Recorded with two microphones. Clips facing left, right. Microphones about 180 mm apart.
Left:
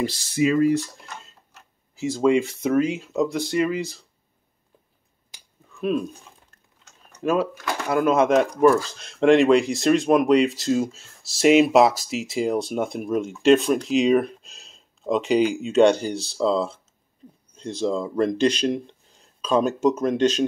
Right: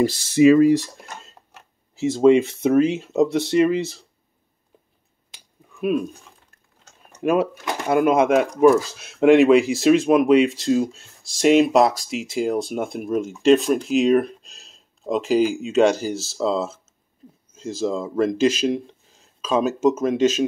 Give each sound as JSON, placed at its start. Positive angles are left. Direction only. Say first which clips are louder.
{"t": 0.4, "sound": "speech", "louder": "right 7 dB", "side_deg": -80}
{"t": 2.0, "sound": "speech", "louder": "right 5 dB", "side_deg": -25}
{"t": 5.8, "sound": "speech", "louder": "right 2 dB", "side_deg": -10}
{"t": 7.2, "sound": "speech", "louder": "right 3 dB", "side_deg": -20}